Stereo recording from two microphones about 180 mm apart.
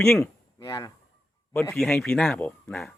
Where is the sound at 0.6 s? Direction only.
20° left (ahead or behind).